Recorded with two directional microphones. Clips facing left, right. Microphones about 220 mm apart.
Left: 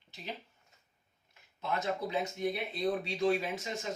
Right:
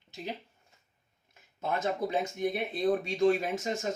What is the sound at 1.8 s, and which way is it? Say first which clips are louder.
Speech: right 3 dB; 45° right (ahead or behind).